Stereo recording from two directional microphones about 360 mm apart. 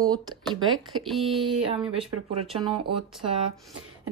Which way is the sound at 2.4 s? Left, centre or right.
Centre.